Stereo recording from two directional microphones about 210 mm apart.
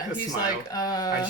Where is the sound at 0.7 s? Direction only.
20° left (ahead or behind).